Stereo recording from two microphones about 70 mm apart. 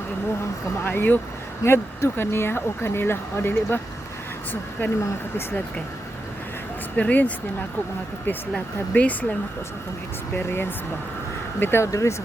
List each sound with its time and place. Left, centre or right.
0.9 s speech: left
1.6 s speech: left
4.8 s speech: left
6.9 s speech: left
8.5 s speech: centre
11.6 s speech: left
11.9 s speech: left